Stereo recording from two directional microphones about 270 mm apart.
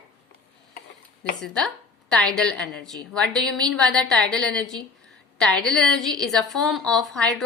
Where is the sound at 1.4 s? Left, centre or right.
Centre.